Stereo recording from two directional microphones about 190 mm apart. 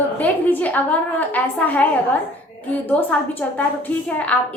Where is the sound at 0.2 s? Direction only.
10° left (ahead or behind).